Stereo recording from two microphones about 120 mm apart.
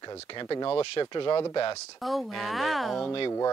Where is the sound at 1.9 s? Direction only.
Centre (ahead or behind).